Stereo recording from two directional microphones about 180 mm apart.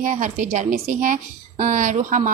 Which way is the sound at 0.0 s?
45° right (ahead or behind).